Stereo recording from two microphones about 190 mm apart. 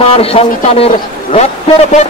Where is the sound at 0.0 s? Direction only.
30° left (ahead or behind).